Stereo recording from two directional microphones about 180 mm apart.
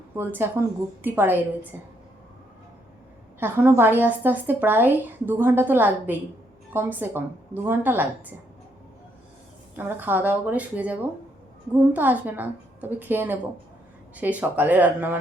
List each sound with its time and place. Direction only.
0.2 s a woman's voice: 10° right (ahead or behind)
3.4 s a woman's voice: 10° right (ahead or behind)
9.7 s a woman's voice: 10° right (ahead or behind)